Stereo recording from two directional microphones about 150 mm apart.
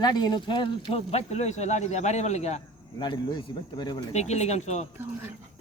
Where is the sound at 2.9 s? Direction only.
30° left (ahead or behind).